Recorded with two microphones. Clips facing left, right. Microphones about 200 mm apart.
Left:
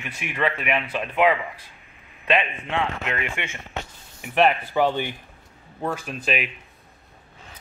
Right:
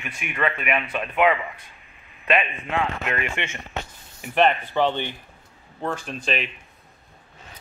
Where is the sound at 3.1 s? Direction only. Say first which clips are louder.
Right 1 dB; 15° left (ahead or behind).